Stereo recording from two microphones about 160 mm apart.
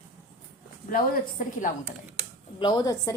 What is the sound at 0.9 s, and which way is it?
Speech, 60° left (ahead or behind).